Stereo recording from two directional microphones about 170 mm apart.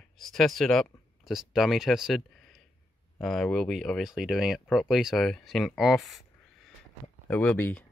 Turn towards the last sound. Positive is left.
turn(degrees=10)  # may be behind; listen again after turning